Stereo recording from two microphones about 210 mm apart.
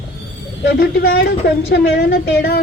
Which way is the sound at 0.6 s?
50° left (ahead or behind).